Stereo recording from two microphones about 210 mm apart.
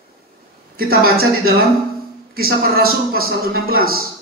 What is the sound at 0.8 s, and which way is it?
Speech, 45° right (ahead or behind).